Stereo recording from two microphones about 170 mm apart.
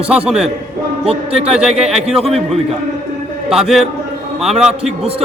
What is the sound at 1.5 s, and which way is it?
Speech, 5° right (ahead or behind).